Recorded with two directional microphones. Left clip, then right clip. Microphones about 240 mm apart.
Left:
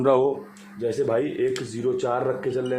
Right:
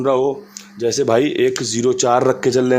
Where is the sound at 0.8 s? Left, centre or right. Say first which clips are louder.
Right 8 dB; right.